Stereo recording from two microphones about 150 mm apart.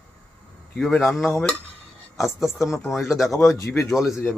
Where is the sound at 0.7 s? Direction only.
5° left (ahead or behind).